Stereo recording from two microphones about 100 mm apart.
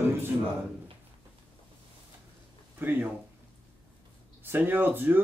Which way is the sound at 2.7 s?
20° right (ahead or behind).